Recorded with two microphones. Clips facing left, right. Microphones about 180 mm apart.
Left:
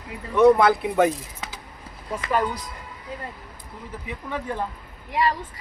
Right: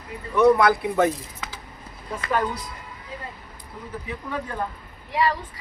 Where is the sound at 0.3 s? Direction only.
25° left (ahead or behind).